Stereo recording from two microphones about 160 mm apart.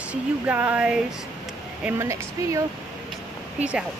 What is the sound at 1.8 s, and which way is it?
Speech, 20° right (ahead or behind).